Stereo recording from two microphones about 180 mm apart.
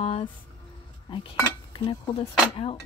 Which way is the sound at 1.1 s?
30° left (ahead or behind).